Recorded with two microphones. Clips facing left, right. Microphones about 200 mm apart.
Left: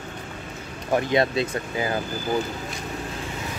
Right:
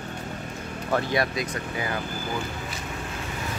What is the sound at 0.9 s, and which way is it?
Speech, 20° left (ahead or behind).